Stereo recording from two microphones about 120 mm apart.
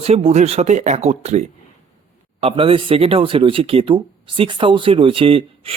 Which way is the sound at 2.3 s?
50° right (ahead or behind).